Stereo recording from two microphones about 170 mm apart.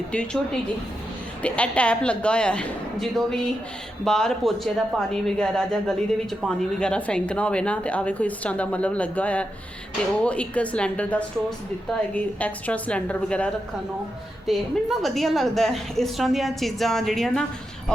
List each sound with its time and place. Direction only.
0.1 s a woman's voice: 5° left (ahead or behind)